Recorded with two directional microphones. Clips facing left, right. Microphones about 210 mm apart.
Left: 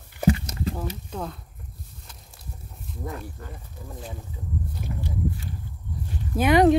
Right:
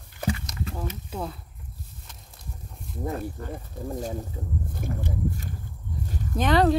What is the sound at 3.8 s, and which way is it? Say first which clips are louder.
Speech: right 8 dB; 40° right (ahead or behind).